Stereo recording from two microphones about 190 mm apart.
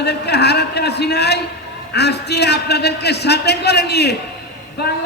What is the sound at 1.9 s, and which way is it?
A man's voice, 60° left (ahead or behind).